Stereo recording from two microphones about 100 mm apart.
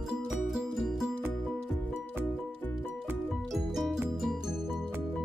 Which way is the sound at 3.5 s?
Centre (ahead or behind).